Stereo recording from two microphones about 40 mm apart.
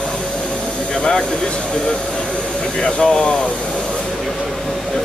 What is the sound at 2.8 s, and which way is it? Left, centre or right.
Speech, left.